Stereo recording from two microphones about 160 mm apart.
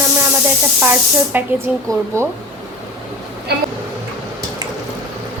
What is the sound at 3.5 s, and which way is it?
Speech, 85° right.